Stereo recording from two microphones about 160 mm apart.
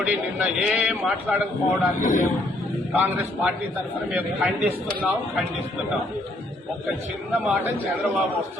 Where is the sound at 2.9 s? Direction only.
10° right (ahead or behind).